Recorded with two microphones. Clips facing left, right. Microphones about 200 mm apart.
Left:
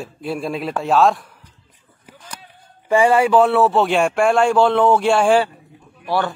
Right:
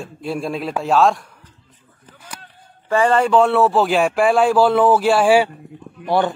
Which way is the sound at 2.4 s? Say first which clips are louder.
Even; 10° left (ahead or behind).